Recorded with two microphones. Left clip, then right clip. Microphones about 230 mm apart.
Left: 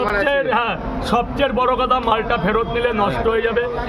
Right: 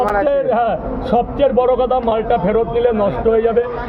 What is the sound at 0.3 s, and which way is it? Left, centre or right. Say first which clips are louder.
Speech: right 3 dB; left.